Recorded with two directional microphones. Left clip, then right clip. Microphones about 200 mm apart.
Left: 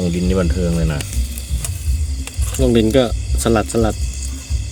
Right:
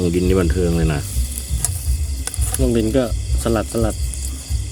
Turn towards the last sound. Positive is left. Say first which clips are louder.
# left 4 dB
turn(degrees=30)  # may be behind; listen again after turning